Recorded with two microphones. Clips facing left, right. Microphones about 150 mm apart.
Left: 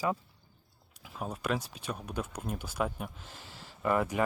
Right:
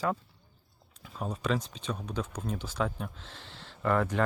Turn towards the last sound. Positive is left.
turn(degrees=10)  # may be behind; listen again after turning